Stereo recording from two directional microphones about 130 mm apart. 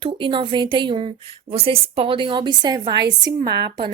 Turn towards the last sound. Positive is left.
turn(degrees=-35)  # may be behind; listen again after turning